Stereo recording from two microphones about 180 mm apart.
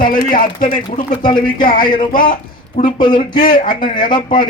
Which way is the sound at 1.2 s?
25° left (ahead or behind).